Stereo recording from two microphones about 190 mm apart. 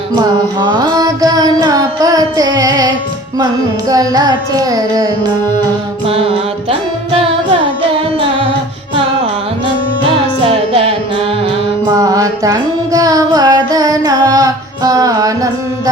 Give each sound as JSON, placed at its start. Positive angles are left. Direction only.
{"t": 0.2, "sound": "music", "side_deg": -20}
{"t": 6.7, "sound": "music", "side_deg": -30}
{"t": 10.4, "sound": "music", "side_deg": -30}
{"t": 11.9, "sound": "music", "side_deg": -20}